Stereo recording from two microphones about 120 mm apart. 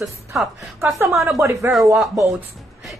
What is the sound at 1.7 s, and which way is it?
Speech, centre (ahead or behind).